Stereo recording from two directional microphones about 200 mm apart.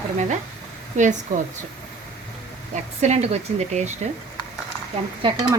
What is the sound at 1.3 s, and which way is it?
Speech, 40° right (ahead or behind).